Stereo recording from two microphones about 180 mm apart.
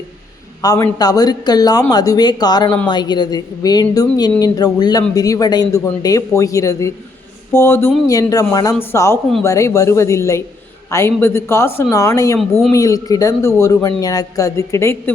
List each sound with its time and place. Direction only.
0.6 s speech: 20° left (ahead or behind)